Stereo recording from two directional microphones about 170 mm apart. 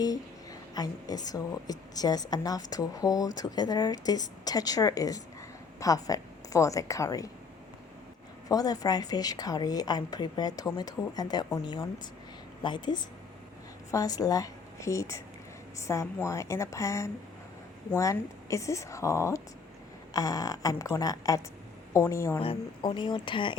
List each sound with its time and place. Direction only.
0.7 s a woman's voice: 20° left (ahead or behind)
8.4 s a woman's voice: 20° left (ahead or behind)
22.4 s a woman's voice: 30° left (ahead or behind)